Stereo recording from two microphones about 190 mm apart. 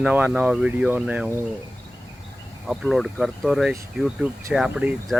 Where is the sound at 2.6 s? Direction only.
Centre (ahead or behind).